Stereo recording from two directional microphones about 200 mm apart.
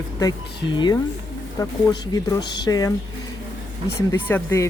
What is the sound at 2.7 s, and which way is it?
Speech, 20° left (ahead or behind).